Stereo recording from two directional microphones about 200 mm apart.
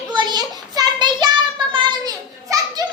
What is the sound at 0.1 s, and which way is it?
Child singing, 20° right (ahead or behind).